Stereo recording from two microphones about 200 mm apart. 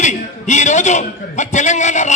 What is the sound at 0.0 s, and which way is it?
A man's voice, 35° left (ahead or behind).